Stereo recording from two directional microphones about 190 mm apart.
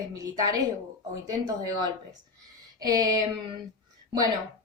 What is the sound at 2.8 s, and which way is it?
Speech, 20° right (ahead or behind).